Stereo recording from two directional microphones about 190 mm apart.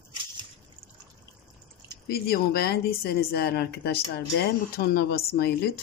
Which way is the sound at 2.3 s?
55° left (ahead or behind).